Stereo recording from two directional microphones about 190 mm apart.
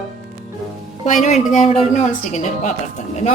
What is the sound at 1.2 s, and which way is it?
A woman's voice, 35° left (ahead or behind).